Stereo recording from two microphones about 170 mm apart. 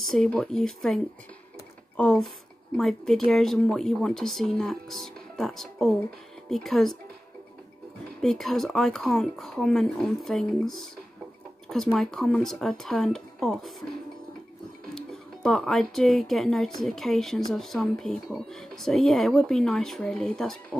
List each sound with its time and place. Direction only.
0.0 s speech: 5° left (ahead or behind)
8.2 s speech: centre (ahead or behind)
15.0 s speech: centre (ahead or behind)